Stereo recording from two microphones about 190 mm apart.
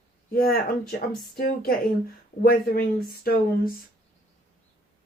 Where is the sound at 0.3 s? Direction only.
55° left (ahead or behind).